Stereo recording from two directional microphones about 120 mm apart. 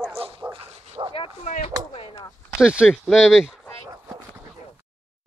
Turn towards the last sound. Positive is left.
turn(degrees=-5)  # may be behind; listen again after turning